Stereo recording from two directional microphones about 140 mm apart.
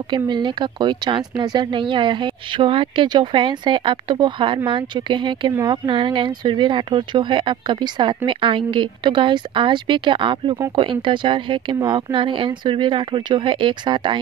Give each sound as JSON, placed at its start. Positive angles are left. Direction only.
{"t": 0.1, "sound": "speech", "side_deg": -35}